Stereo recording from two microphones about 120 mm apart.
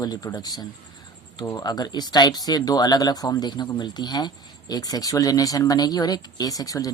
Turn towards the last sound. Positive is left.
turn(degrees=30)  # may be behind; listen again after turning